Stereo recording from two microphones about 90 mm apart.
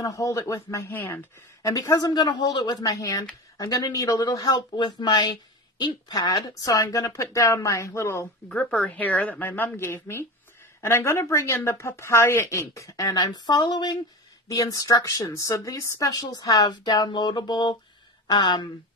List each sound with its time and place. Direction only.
0.0 s speech: 35° left (ahead or behind)
1.6 s a woman's voice: 40° left (ahead or behind)
2.9 s speech: 35° left (ahead or behind)
4.7 s speech: 55° left (ahead or behind); by 8.3 s 30° left (ahead or behind)
8.6 s speech: 15° left (ahead or behind); by 13.9 s 55° left (ahead or behind)
14.5 s a woman's voice: 40° left (ahead or behind)